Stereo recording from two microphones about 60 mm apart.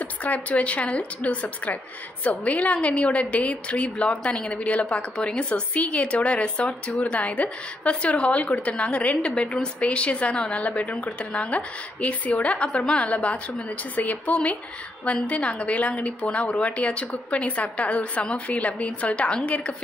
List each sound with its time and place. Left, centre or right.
0.0 s a woman's voice: left